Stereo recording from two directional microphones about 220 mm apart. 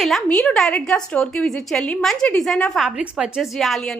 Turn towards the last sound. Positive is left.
turn(degrees=0)  # may be behind; listen again after turning